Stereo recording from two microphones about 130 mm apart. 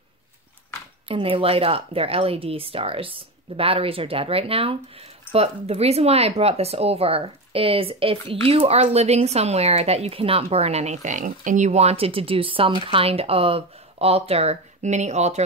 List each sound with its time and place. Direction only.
1.0 s speech: 45° right (ahead or behind); by 15.4 s 60° right (ahead or behind)